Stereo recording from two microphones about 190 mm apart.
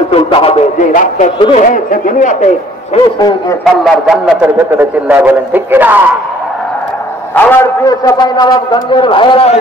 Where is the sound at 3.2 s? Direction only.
20° left (ahead or behind).